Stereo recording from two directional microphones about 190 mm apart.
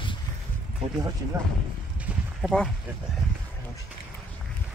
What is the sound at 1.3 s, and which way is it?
Speech, 15° right (ahead or behind).